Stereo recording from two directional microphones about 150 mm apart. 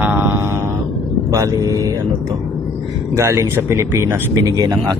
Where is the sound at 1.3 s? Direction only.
25° right (ahead or behind).